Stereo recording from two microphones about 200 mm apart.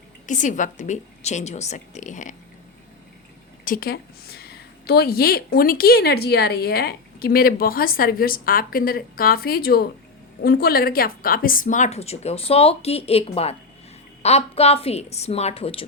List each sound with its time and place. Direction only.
0.3 s a woman's voice: 40° left (ahead or behind)
3.6 s a woman's voice: 45° left (ahead or behind); by 15.8 s 30° left (ahead or behind)